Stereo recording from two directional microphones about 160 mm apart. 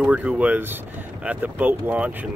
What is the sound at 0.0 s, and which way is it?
Speech, 5° right (ahead or behind).